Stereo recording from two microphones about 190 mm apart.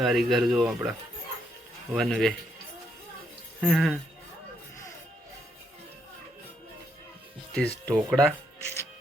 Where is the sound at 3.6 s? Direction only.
Centre (ahead or behind).